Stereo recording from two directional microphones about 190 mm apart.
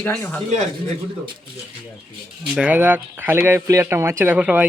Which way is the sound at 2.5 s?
10° right (ahead or behind).